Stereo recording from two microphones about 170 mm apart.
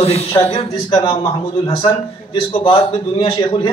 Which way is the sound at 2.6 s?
30° left (ahead or behind).